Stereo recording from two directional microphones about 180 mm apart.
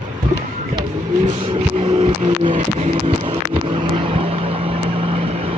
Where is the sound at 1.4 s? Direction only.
25° right (ahead or behind).